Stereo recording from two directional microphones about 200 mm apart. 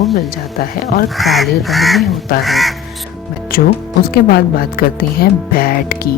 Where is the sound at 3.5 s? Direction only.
45° left (ahead or behind).